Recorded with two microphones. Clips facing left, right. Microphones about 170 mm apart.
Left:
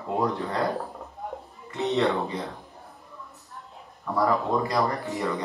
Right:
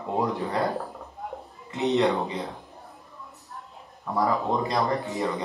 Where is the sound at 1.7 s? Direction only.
20° right (ahead or behind).